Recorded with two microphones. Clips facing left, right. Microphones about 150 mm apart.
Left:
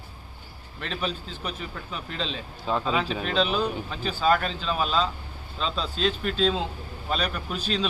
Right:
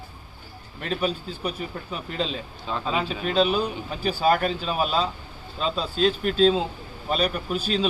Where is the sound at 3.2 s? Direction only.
40° right (ahead or behind).